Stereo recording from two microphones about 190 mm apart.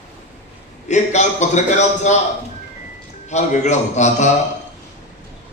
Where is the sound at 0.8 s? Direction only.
35° left (ahead or behind).